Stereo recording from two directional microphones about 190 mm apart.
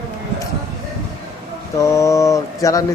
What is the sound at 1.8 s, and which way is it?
Mantra, 15° left (ahead or behind).